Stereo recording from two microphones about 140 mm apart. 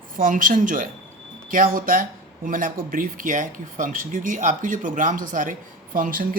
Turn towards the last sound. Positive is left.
turn(degrees=-80)